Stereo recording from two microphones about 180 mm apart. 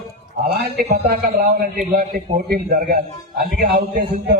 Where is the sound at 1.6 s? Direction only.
55° right (ahead or behind).